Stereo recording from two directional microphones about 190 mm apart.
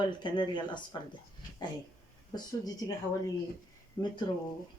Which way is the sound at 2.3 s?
20° left (ahead or behind).